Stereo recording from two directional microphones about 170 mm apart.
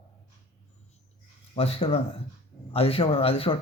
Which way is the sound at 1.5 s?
35° left (ahead or behind).